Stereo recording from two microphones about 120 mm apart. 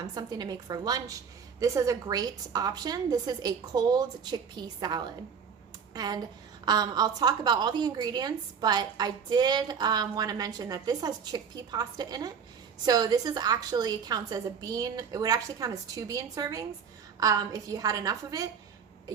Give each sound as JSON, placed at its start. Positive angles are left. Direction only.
{"t": 0.1, "sound": "a woman's voice", "side_deg": -35}